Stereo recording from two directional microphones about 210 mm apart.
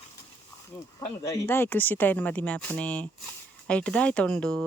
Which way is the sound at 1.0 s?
10° left (ahead or behind).